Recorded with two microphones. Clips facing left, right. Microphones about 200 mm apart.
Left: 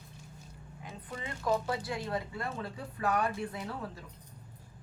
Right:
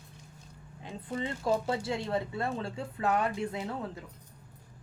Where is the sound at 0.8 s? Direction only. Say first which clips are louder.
Right 7 dB; 30° right (ahead or behind).